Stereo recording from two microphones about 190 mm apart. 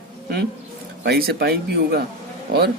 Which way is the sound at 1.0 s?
55° right (ahead or behind).